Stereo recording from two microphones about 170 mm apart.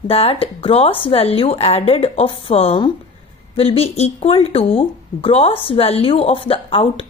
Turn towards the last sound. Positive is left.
turn(degrees=35)  # may be behind; listen again after turning